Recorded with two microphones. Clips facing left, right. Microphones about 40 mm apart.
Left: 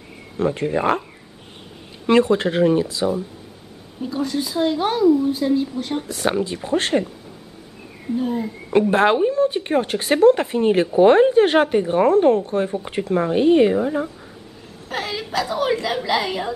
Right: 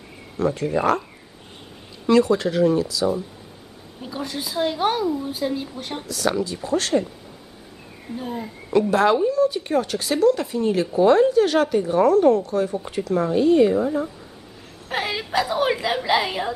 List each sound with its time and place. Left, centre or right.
0.4 s speech: left
2.0 s a woman's voice: left
4.0 s speech: centre
6.0 s a woman's voice: left
8.2 s speech: centre
8.9 s a woman's voice: left
14.9 s a woman's voice: centre